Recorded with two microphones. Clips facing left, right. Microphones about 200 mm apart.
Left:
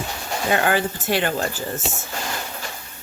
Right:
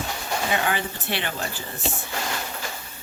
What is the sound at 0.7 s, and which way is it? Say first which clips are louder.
Speech: left 6 dB; 45° left (ahead or behind).